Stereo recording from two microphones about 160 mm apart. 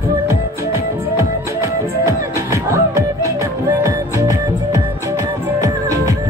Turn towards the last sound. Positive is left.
turn(degrees=-20)  # may be behind; listen again after turning